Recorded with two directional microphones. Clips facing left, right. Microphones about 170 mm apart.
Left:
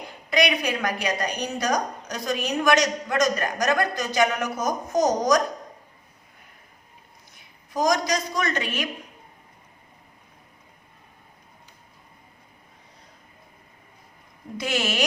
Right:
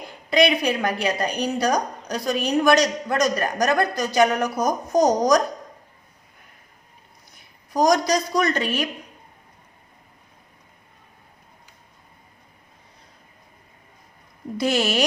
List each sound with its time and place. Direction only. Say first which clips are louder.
0.3 s a woman's voice: right 4 dB; 30° right (ahead or behind)
7.7 s a woman's voice: right 4 dB; 35° right (ahead or behind)
14.6 s a woman's voice: right 5 dB; 35° right (ahead or behind)